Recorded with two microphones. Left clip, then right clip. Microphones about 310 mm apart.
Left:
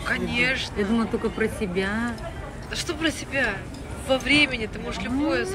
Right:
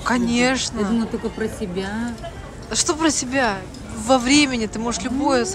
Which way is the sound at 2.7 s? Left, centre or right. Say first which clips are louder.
Right 7 dB; centre.